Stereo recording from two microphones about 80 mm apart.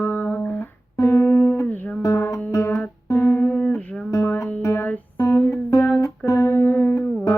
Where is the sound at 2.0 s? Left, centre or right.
Left.